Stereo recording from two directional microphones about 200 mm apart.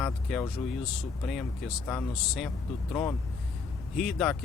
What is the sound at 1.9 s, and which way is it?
Speech, 5° left (ahead or behind).